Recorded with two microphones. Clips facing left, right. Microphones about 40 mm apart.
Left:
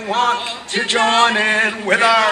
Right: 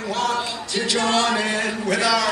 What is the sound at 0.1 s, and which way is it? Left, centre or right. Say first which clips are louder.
Male singing: left 6 dB; left.